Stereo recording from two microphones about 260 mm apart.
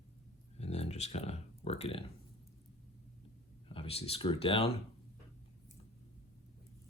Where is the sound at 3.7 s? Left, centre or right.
Left.